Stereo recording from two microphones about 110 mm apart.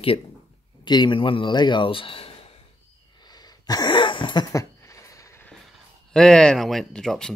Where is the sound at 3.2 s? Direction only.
40° left (ahead or behind).